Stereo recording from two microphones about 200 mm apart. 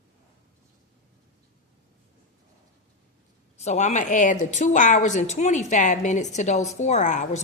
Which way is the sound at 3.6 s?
35° left (ahead or behind).